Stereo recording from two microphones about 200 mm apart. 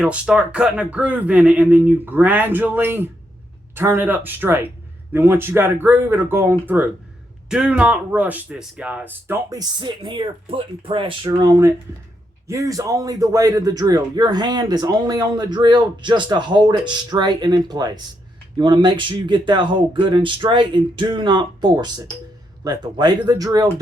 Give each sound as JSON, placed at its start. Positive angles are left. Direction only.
{"t": 0.0, "sound": "a man's voice", "side_deg": -5}